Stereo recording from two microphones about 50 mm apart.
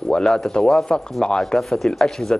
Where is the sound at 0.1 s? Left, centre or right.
Centre.